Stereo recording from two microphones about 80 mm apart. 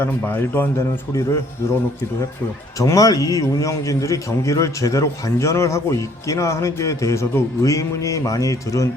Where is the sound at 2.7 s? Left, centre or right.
Left.